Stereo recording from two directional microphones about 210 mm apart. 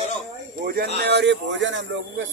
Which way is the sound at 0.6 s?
45° right (ahead or behind).